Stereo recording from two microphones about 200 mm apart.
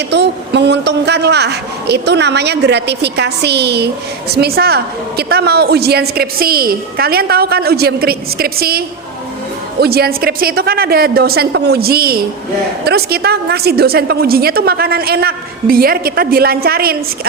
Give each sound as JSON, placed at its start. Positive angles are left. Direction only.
{"t": 0.1, "sound": "a man's voice", "side_deg": -60}
{"t": 9.8, "sound": "a man's voice", "side_deg": -50}